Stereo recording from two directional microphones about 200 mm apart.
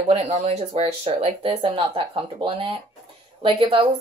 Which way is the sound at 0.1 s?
30° right (ahead or behind).